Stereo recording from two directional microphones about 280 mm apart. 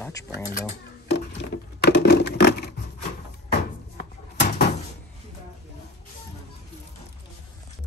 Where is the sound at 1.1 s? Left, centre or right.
Left.